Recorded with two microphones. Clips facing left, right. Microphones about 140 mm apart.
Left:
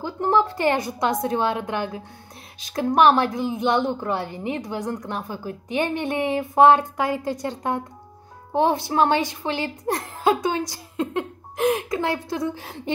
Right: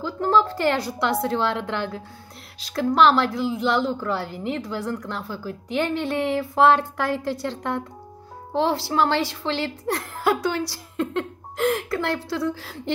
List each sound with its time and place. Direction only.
0.0 s a woman's voice: 20° left (ahead or behind)